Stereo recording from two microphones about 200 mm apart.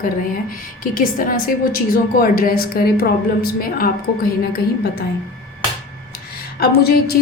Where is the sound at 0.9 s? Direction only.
45° left (ahead or behind).